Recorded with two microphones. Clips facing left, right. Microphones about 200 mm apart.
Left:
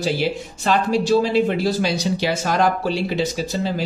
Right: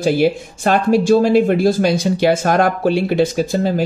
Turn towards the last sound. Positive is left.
turn(degrees=-50)  # may be behind; listen again after turning